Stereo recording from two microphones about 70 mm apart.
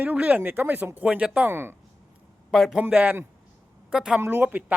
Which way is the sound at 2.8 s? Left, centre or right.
Right.